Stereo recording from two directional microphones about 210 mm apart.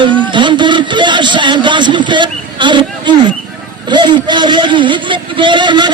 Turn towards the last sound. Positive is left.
turn(degrees=-20)  # may be behind; listen again after turning